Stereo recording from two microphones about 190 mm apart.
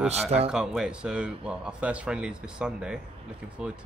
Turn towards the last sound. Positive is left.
turn(degrees=-5)  # may be behind; listen again after turning